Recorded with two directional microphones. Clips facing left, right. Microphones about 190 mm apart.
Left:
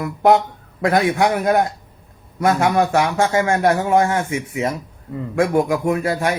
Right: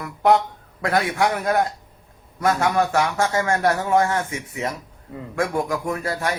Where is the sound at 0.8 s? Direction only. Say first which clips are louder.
Left 4 dB; 20° left (ahead or behind).